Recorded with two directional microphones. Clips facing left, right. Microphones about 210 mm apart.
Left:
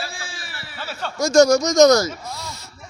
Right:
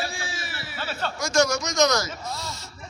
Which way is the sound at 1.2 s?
45° left (ahead or behind).